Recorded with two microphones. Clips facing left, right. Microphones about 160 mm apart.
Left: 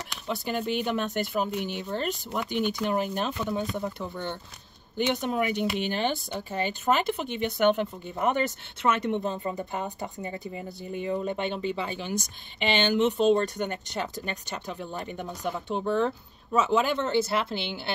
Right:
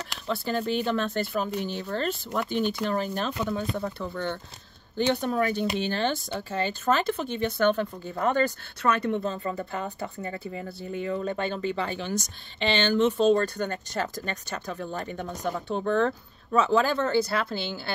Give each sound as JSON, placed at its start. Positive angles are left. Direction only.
{"t": 0.3, "sound": "speech", "side_deg": 15}